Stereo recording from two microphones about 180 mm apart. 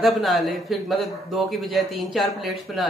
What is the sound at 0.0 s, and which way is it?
A man's voice, centre (ahead or behind).